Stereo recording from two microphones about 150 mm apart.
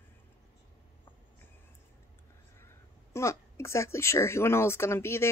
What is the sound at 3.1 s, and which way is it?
A woman's voice, 20° left (ahead or behind).